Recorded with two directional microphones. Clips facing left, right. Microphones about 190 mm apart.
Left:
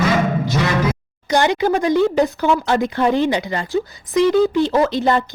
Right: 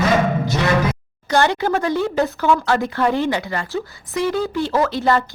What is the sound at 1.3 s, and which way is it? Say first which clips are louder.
A woman's voice: left 1 dB; 15° left (ahead or behind).